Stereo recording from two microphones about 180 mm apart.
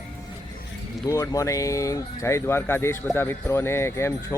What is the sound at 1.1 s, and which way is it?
Speech, 15° left (ahead or behind).